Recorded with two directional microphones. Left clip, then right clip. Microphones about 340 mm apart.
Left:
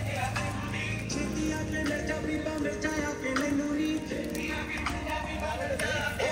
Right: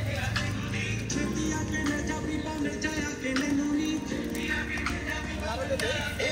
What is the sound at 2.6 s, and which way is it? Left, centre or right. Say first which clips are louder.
Music: left 1 dB; centre.